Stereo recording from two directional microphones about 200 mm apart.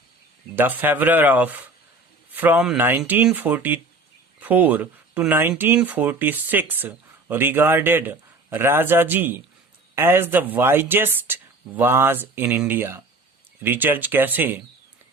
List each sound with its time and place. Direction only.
0.5 s speech: 10° right (ahead or behind)